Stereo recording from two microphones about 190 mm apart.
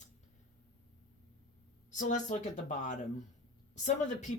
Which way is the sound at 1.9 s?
40° left (ahead or behind).